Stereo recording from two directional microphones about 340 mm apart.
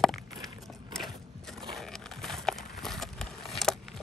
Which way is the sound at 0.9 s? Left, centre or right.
Centre.